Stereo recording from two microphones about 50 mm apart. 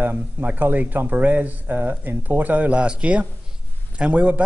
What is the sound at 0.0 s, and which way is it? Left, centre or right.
Speech, right.